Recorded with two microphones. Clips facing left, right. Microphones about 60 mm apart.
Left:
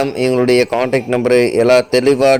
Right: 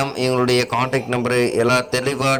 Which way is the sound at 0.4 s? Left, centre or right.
Left.